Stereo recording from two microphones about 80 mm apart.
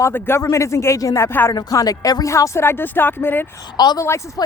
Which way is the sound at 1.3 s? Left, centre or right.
Left.